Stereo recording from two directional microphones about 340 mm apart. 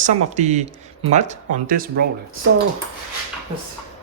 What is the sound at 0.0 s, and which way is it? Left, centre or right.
Speech, right.